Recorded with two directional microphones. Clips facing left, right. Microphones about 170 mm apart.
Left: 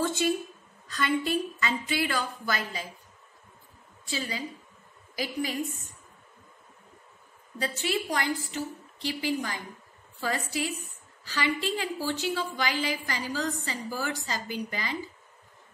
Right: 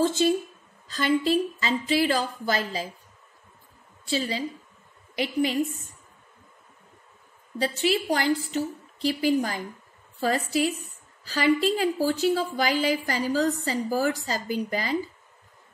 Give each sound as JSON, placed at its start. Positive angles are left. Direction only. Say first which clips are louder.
{"t": 0.8, "sound": "a woman's voice", "louder": "right 5 dB", "side_deg": -30}
{"t": 4.1, "sound": "a woman's voice", "louder": "right 6 dB", "side_deg": -30}
{"t": 7.5, "sound": "a woman's voice", "louder": "right 5 dB", "side_deg": -30}